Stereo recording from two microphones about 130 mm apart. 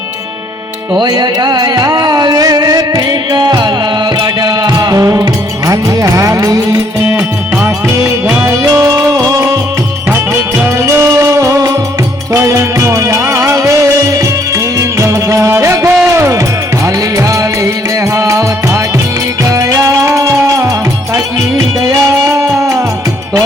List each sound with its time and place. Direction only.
0.9 s music: 30° right (ahead or behind)
7.1 s music: 15° right (ahead or behind)
8.7 s music: 25° right (ahead or behind)
10.8 s music: 20° right (ahead or behind)
22.4 s music: 25° right (ahead or behind)